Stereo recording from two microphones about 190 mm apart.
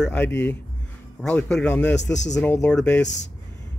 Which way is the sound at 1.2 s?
5° left (ahead or behind).